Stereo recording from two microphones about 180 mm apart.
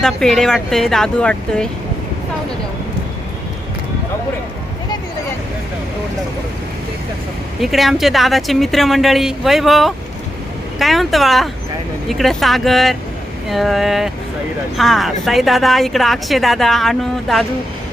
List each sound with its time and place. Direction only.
0.0 s a woman's voice: 5° left (ahead or behind)
7.6 s a woman's voice: centre (ahead or behind)